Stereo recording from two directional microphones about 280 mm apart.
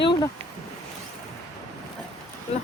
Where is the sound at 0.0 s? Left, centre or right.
Centre.